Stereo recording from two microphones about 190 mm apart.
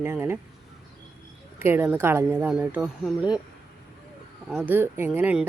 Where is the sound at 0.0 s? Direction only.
10° right (ahead or behind).